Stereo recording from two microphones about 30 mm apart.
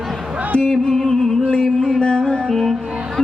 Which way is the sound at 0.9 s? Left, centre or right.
Centre.